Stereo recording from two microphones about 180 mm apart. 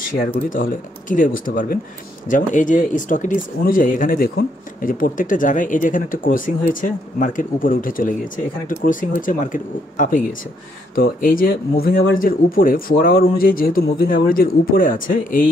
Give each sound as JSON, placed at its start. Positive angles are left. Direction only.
{"t": 0.5, "sound": "speech", "side_deg": 45}